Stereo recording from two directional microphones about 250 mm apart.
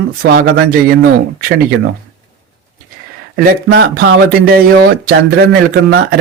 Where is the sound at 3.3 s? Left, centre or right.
Right.